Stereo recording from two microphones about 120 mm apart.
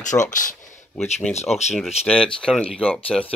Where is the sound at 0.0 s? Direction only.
90° left.